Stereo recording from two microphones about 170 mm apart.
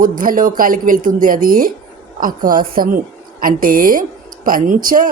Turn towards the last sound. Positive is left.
turn(degrees=-55)  # may be behind; listen again after turning